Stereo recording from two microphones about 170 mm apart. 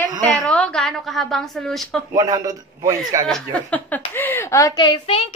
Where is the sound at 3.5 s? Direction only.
10° left (ahead or behind); by 5.2 s 30° left (ahead or behind).